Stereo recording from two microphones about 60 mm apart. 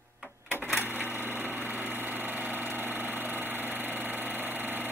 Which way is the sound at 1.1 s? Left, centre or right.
Right.